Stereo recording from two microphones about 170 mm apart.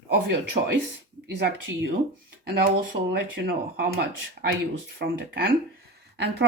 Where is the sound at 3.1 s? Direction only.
65° right (ahead or behind).